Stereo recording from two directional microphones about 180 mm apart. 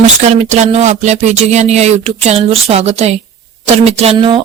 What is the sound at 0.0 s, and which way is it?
A woman's voice, 40° right (ahead or behind).